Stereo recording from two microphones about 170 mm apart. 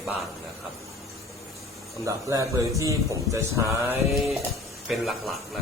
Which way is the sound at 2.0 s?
20° right (ahead or behind).